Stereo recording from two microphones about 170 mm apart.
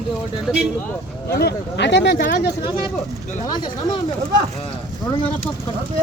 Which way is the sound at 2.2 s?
65° left (ahead or behind).